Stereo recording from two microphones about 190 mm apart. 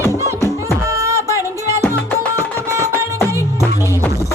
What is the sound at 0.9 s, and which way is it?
Music, 15° right (ahead or behind).